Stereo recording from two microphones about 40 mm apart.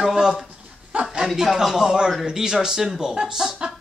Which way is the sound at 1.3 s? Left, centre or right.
Centre.